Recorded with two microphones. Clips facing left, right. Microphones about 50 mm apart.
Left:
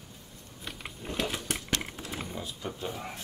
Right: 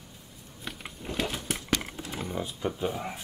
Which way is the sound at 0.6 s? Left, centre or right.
Centre.